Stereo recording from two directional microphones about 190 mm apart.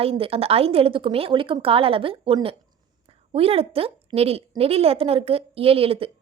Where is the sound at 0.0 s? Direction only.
30° right (ahead or behind).